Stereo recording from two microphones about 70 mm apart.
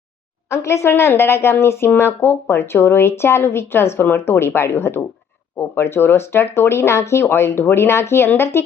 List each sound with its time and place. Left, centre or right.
0.5 s a woman's voice: left